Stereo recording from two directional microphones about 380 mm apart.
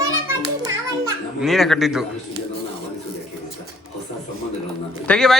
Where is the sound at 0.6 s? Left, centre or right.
Centre.